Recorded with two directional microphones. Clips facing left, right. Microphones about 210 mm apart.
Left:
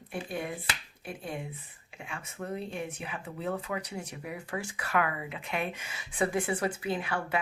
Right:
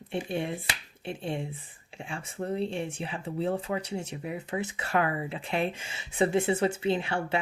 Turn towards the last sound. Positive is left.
turn(degrees=-25)  # may be behind; listen again after turning